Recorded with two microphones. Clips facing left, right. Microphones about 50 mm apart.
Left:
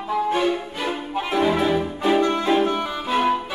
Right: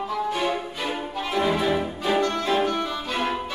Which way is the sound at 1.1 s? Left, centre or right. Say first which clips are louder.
Left 4 dB; centre.